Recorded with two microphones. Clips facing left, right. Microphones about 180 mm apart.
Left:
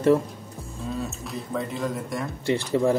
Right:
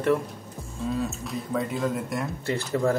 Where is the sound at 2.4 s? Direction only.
15° left (ahead or behind).